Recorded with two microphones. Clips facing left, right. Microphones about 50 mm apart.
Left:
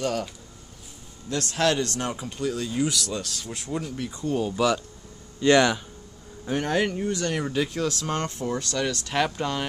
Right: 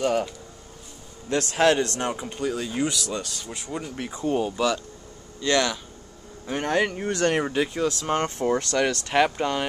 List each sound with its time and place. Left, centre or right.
0.0 s speech: centre
1.3 s a man's voice: right; by 3.9 s centre
3.9 s a man's voice: right
4.6 s speech: centre
5.4 s speech: centre
6.7 s speech: centre
7.1 s speech: right
7.4 s speech: centre
8.2 s speech: right
9.1 s speech: centre